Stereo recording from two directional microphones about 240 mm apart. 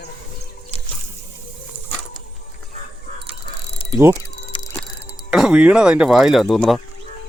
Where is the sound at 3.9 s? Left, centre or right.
Centre.